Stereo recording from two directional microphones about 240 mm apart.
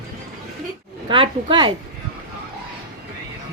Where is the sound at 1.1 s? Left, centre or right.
Centre.